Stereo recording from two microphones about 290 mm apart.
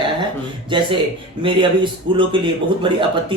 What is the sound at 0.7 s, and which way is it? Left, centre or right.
Speech, centre.